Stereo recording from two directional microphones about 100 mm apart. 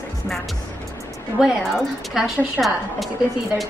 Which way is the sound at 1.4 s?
5° right (ahead or behind).